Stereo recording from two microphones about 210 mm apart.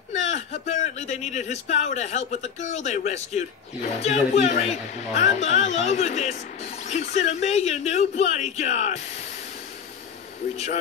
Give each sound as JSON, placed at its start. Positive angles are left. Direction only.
{"t": 0.1, "sound": "speech", "side_deg": 30}
{"t": 10.5, "sound": "speech", "side_deg": 30}